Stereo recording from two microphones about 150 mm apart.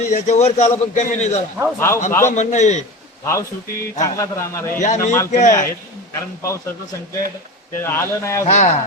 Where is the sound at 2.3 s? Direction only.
50° left (ahead or behind).